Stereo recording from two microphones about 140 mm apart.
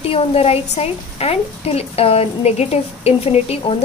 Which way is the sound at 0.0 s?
45° left (ahead or behind).